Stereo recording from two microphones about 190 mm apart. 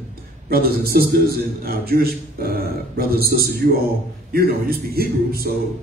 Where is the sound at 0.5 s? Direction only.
50° right (ahead or behind).